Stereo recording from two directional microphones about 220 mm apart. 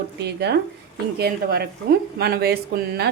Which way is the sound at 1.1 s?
45° right (ahead or behind).